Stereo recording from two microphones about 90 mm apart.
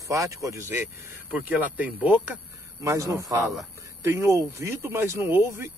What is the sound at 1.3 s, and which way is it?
Speech, 15° right (ahead or behind).